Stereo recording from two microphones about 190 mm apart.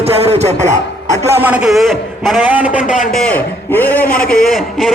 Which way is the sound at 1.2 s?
10° right (ahead or behind).